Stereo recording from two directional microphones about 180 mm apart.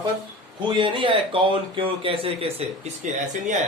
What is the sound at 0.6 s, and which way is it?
Speech, 25° right (ahead or behind).